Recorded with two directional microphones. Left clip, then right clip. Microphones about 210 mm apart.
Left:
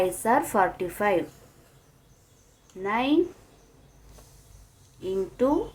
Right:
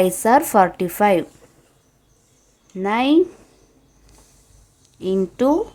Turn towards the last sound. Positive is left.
turn(degrees=-45)  # may be behind; listen again after turning